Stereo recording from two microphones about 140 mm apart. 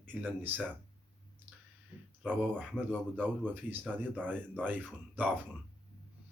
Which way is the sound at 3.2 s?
15° right (ahead or behind).